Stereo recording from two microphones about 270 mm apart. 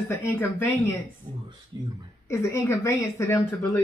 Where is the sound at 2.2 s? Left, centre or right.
Centre.